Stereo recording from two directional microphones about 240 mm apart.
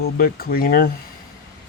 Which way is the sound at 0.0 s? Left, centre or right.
Left.